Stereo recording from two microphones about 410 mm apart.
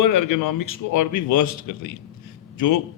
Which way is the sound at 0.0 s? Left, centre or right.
Left.